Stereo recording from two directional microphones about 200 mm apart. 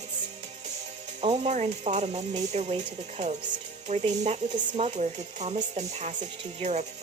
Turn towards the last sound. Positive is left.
turn(degrees=-35)  # may be behind; listen again after turning